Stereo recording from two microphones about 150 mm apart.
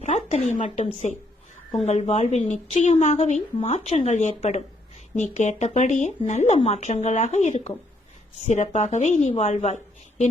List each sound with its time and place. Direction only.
0.0 s speech: 50° left (ahead or behind)